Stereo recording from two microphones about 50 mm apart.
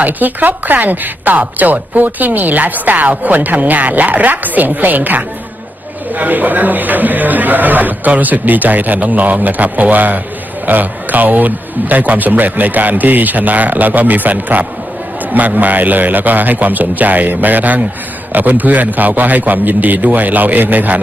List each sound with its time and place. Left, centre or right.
0.0 s speech: right